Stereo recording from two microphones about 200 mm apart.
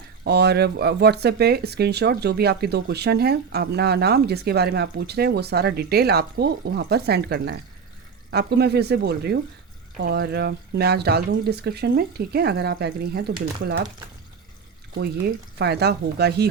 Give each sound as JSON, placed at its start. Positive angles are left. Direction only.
{"t": 0.3, "sound": "speech", "side_deg": -55}
{"t": 15.5, "sound": "speech", "side_deg": -55}